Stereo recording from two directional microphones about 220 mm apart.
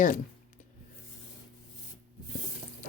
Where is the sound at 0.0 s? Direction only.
35° left (ahead or behind).